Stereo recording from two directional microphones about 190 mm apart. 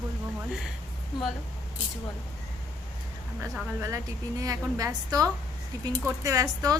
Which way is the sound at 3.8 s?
15° right (ahead or behind).